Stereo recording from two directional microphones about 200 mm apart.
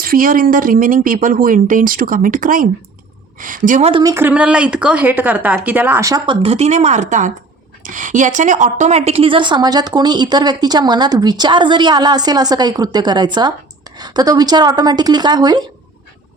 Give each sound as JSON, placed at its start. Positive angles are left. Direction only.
{"t": 0.0, "sound": "a woman's voice", "side_deg": -45}
{"t": 4.0, "sound": "speech", "side_deg": -10}
{"t": 6.4, "sound": "a woman's voice", "side_deg": -30}